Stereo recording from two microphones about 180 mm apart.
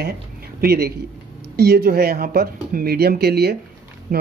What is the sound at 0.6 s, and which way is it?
Speech, 60° right (ahead or behind).